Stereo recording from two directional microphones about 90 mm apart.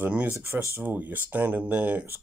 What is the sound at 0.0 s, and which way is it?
Speech, 20° right (ahead or behind).